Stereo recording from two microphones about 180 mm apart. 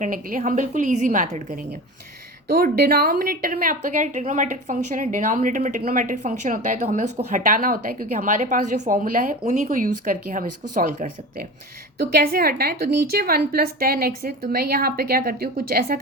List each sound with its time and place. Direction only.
0.0 s a woman's voice: 45° right (ahead or behind)
9.4 s a woman's voice: 40° right (ahead or behind); by 16.0 s 60° right (ahead or behind)